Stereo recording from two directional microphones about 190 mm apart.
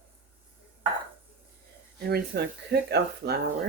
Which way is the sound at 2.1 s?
60° right (ahead or behind).